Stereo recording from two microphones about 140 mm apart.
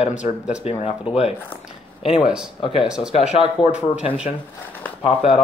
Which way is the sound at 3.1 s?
50° left (ahead or behind).